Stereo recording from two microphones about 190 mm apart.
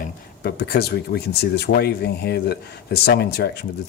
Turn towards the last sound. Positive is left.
turn(degrees=55)  # may be behind; listen again after turning